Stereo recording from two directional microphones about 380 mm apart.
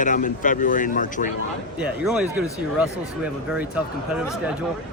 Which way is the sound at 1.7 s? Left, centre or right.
Centre.